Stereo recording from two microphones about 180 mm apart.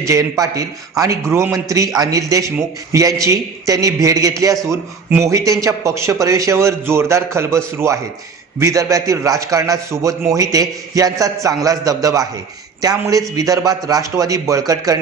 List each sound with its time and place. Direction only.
0.0 s a man's voice: 20° right (ahead or behind)